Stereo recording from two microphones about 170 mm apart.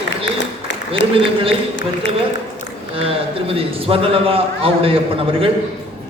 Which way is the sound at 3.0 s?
35° right (ahead or behind).